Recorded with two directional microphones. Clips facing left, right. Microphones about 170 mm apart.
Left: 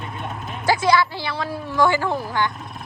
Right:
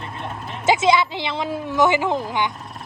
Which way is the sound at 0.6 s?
20° right (ahead or behind).